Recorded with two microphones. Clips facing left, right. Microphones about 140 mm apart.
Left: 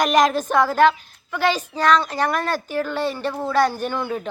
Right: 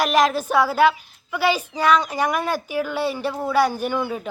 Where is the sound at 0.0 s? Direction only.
Centre (ahead or behind).